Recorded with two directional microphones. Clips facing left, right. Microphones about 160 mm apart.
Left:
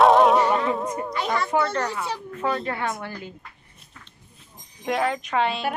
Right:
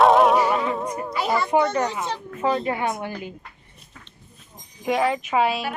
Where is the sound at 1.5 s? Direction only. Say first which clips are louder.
Right 3 dB; 15° right (ahead or behind).